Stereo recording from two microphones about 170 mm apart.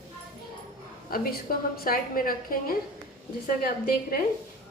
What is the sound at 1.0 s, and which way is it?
A woman's voice, 60° left (ahead or behind).